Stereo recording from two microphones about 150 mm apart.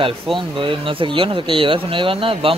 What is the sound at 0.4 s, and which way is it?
Speech, 35° right (ahead or behind).